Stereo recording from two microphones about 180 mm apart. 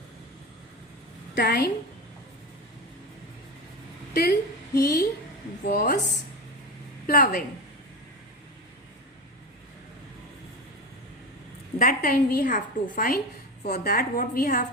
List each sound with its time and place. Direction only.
1.4 s a woman's voice: 55° left (ahead or behind)
4.1 s a woman's voice: 60° left (ahead or behind)
5.6 s a woman's voice: 45° left (ahead or behind)
7.1 s a woman's voice: 50° left (ahead or behind)
11.8 s a woman's voice: 50° left (ahead or behind)